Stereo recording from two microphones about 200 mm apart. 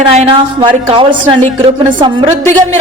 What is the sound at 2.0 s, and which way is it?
Speech, 25° right (ahead or behind).